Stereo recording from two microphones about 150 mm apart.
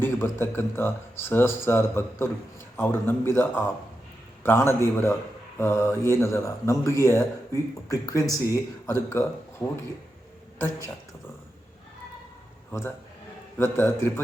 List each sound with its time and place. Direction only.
0.0 s speech: 15° left (ahead or behind)
13.6 s speech: 15° left (ahead or behind)